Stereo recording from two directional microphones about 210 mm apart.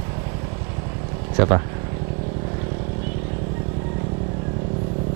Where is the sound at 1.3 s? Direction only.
20° right (ahead or behind).